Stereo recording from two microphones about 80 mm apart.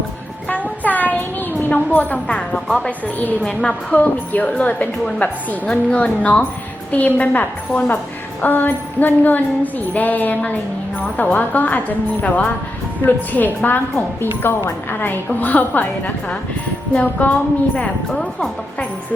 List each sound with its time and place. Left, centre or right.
0.8 s music: left
2.6 s a woman's voice: centre
6.9 s music: left
13.1 s music: left
17.7 s a woman's voice: centre